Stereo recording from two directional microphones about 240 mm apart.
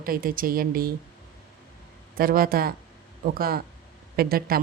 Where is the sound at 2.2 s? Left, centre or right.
Right.